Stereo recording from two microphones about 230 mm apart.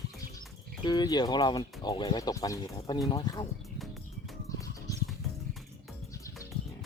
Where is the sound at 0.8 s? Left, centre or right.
Centre.